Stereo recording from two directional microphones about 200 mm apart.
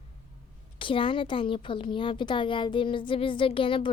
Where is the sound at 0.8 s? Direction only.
25° left (ahead or behind).